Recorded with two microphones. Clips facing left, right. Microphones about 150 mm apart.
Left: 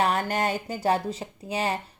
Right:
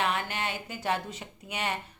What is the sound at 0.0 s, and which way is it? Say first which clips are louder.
A woman's voice: left 6 dB; 40° left (ahead or behind).